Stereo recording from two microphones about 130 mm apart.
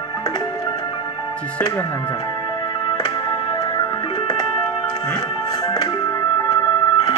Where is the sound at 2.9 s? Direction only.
35° left (ahead or behind).